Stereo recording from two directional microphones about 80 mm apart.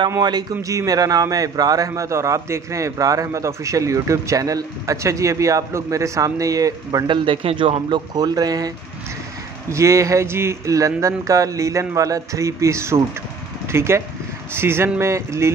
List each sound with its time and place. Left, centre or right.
0.2 s speech: right
7.1 s speech: right
9.7 s speech: right